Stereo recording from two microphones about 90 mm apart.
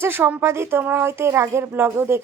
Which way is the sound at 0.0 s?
25° right (ahead or behind).